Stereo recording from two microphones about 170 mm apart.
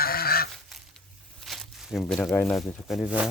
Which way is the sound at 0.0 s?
65° left (ahead or behind).